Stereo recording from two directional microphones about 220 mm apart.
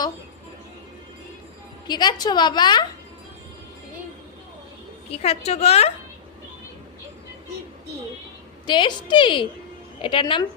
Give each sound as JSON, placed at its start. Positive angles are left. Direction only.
{"t": 1.9, "sound": "a woman's voice", "side_deg": 20}
{"t": 5.1, "sound": "a woman's voice", "side_deg": 25}
{"t": 8.6, "sound": "a woman's voice", "side_deg": 20}